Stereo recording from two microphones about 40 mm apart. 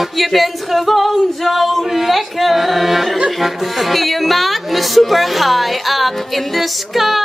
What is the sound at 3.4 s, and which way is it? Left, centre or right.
Music, centre.